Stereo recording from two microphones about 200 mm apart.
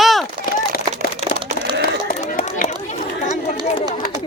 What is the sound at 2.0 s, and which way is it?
Run, 45° left (ahead or behind).